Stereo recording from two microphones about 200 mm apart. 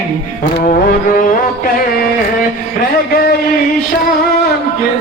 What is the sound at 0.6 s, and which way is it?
Music, 45° left (ahead or behind).